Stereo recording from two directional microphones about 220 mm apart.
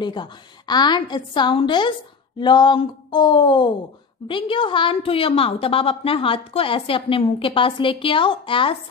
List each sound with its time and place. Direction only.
0.0 s a woman's voice: 20° left (ahead or behind)